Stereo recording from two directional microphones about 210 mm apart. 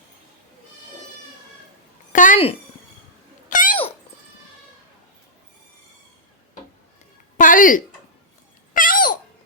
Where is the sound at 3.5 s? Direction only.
40° left (ahead or behind).